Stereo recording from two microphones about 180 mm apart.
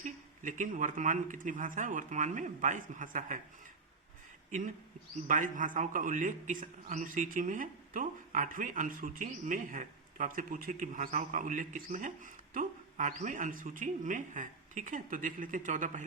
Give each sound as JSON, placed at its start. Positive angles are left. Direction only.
{"t": 0.0, "sound": "a man's voice", "side_deg": -45}
{"t": 5.3, "sound": "a man's voice", "side_deg": -45}